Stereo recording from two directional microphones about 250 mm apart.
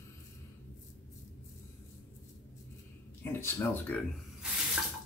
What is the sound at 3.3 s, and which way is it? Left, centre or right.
Speech, centre.